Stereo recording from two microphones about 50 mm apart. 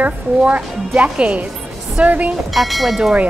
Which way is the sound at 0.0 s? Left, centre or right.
Right.